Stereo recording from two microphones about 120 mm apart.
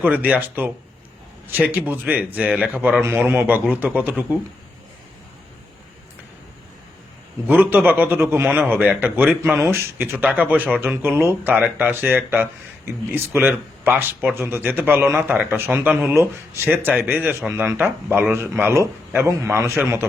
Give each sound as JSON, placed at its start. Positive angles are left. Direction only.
{"t": 0.0, "sound": "speech", "side_deg": -15}
{"t": 7.4, "sound": "speech", "side_deg": -15}